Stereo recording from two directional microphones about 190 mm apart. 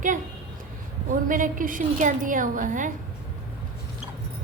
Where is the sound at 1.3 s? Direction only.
45° right (ahead or behind).